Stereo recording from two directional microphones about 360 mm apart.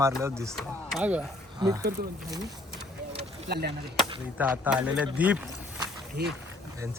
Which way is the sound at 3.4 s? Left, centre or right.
Right.